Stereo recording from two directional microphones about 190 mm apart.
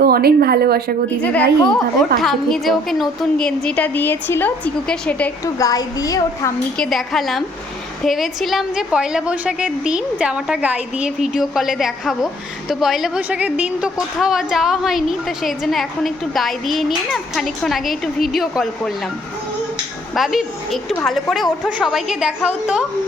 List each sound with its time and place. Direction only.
0.0 s a woman's voice: 55° right (ahead or behind)
1.2 s a woman's voice: 5° left (ahead or behind)
5.5 s a woman's voice: 20° left (ahead or behind)
6.7 s a woman's voice: centre (ahead or behind)
20.1 s a woman's voice: centre (ahead or behind)